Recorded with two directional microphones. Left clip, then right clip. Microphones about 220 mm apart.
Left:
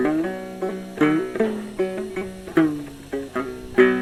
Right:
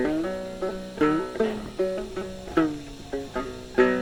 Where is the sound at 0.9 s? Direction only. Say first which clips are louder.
Left 3 dB; 35° left (ahead or behind).